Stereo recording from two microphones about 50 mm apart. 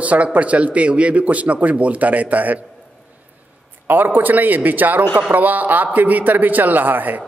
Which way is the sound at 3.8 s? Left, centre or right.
Right.